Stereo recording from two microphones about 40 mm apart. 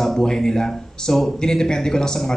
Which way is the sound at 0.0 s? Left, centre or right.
Centre.